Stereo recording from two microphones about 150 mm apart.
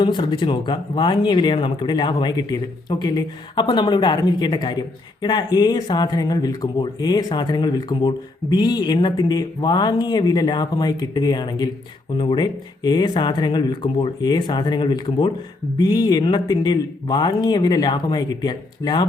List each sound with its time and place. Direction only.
0.0 s speech: 30° left (ahead or behind)